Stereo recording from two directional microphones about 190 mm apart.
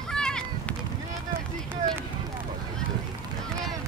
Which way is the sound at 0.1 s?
5° left (ahead or behind).